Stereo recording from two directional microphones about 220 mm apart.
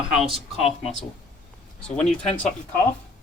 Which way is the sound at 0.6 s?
25° left (ahead or behind).